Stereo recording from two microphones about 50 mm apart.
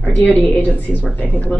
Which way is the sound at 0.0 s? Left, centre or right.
Left.